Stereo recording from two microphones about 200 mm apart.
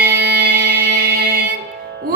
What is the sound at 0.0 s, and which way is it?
Music, 50° right (ahead or behind).